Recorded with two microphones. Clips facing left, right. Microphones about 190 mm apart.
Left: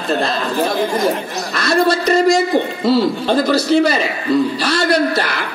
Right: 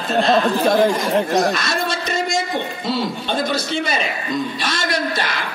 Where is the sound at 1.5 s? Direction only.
65° left (ahead or behind).